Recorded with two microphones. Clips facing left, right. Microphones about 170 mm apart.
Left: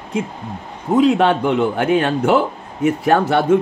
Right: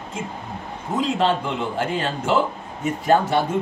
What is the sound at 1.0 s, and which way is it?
Speech, 60° left (ahead or behind).